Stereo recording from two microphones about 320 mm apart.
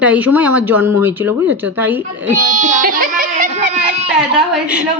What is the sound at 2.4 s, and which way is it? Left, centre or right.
A woman's voice, right.